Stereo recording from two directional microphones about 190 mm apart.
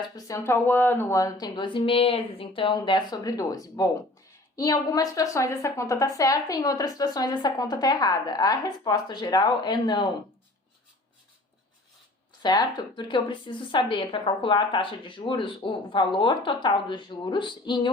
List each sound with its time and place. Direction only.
0.2 s a woman's voice: 15° left (ahead or behind)
12.4 s a woman's voice: 20° left (ahead or behind)